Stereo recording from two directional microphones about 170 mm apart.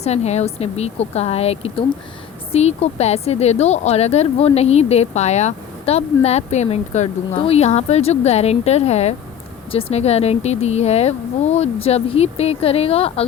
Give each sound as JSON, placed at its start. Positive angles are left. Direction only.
{"t": 0.0, "sound": "a woman's voice", "side_deg": 40}